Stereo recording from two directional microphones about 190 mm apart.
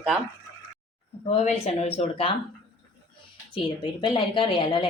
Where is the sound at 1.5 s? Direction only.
35° left (ahead or behind).